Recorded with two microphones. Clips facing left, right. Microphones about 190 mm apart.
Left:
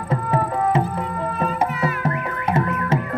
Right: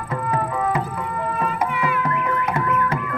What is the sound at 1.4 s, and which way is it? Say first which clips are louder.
Music: left 2 dB; 30° left (ahead or behind).